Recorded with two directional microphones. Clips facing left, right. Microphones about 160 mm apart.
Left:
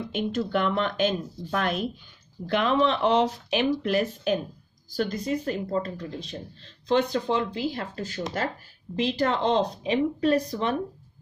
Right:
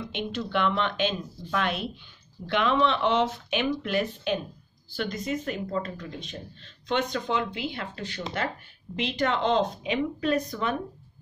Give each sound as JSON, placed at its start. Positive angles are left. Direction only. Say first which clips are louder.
{"t": 0.0, "sound": "speech", "louder": "left 4 dB", "side_deg": 40}